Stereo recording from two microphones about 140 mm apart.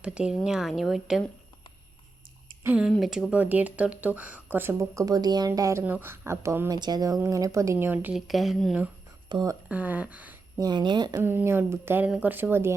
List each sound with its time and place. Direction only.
0.0 s speech: 5° right (ahead or behind)
2.6 s speech: 5° right (ahead or behind)
6.7 s a woman's voice: 30° right (ahead or behind)
8.1 s speech: centre (ahead or behind)
9.3 s a woman's voice: 25° right (ahead or behind)
9.6 s speech: 10° right (ahead or behind)
10.6 s speech: 30° right (ahead or behind)
11.1 s speech: 15° right (ahead or behind)